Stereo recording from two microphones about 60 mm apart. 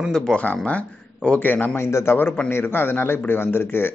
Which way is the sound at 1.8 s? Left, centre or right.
Left.